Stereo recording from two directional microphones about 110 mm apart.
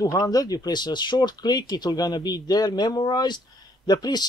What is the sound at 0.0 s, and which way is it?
Speech, 35° left (ahead or behind).